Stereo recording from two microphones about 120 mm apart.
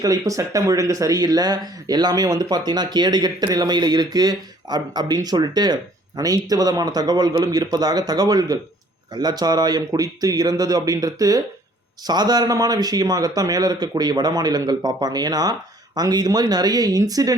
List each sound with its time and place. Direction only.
0.0 s speech: 30° right (ahead or behind)